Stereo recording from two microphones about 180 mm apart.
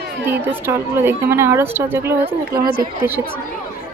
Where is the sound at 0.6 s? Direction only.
15° right (ahead or behind).